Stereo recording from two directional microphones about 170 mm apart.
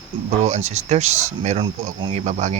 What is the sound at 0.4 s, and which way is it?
Speech, 40° right (ahead or behind).